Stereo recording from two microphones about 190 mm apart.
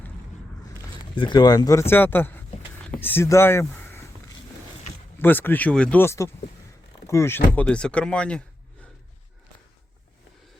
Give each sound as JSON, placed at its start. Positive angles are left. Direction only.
{"t": 1.1, "sound": "speech", "side_deg": 25}
{"t": 5.2, "sound": "speech", "side_deg": 10}